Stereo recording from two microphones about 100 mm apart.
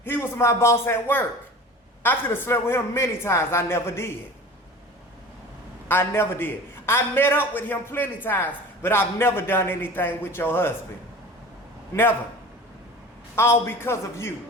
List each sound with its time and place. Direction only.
0.0 s a man's voice: 25° left (ahead or behind)
5.9 s a man's voice: 25° left (ahead or behind)
13.3 s a man's voice: 25° left (ahead or behind)